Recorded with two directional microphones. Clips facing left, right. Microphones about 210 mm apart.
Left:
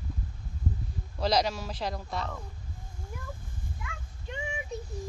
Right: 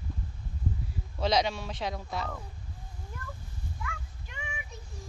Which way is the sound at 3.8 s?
30° left (ahead or behind).